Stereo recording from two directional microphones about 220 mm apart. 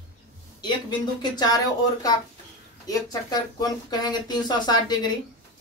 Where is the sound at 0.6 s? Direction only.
20° left (ahead or behind).